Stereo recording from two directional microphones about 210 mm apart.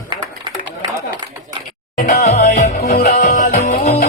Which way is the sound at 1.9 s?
40° left (ahead or behind).